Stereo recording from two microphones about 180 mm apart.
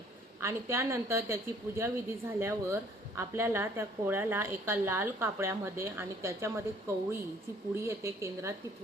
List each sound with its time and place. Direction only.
0.4 s a woman's voice: 15° right (ahead or behind)